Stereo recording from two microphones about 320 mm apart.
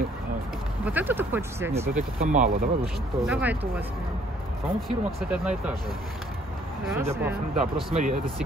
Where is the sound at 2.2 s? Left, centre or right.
Right.